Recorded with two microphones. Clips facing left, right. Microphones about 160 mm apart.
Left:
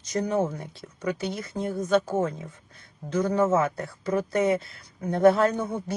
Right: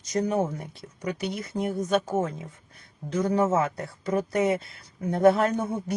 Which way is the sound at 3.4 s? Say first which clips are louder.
Left 2 dB; 20° right (ahead or behind).